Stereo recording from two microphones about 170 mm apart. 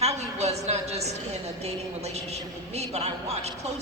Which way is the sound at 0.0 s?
40° right (ahead or behind).